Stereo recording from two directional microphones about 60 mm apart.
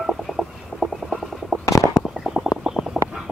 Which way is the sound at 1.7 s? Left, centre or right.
Left.